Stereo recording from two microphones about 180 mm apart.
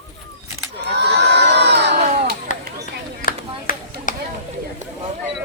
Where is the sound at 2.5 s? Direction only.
45° left (ahead or behind).